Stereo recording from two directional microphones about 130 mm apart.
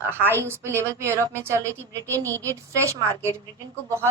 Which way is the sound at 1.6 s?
15° left (ahead or behind).